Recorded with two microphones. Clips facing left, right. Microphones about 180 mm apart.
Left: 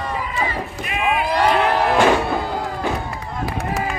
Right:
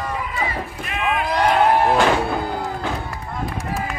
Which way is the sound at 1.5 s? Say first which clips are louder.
Right 2 dB; 85° left.